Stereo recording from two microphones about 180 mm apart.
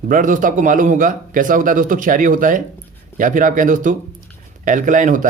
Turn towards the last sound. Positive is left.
turn(degrees=-45)  # may be behind; listen again after turning